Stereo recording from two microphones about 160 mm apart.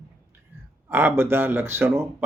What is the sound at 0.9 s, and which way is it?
Speech, 15° right (ahead or behind).